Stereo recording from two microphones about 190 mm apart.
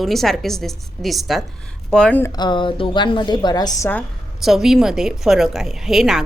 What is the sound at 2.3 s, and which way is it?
A woman's voice, 25° left (ahead or behind).